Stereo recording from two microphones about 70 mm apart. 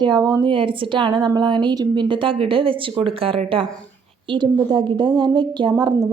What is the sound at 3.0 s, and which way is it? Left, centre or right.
Speech, right.